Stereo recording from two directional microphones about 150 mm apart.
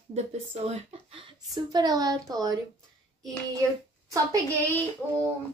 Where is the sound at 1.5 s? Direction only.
25° right (ahead or behind).